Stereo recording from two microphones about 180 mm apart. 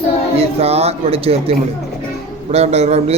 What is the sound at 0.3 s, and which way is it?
Speech, 35° right (ahead or behind).